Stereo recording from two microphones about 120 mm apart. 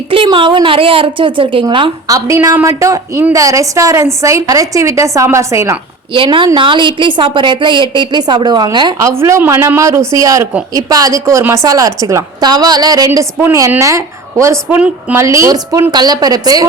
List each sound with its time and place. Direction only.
0.1 s speech: 45° right (ahead or behind)
2.0 s a woman's voice: 25° right (ahead or behind)
6.1 s a woman's voice: 45° right (ahead or behind)
9.0 s a woman's voice: 25° right (ahead or behind)
13.1 s a woman's voice: 20° right (ahead or behind)